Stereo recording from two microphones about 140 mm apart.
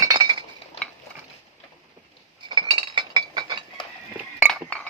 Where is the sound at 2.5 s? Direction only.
35° right (ahead or behind).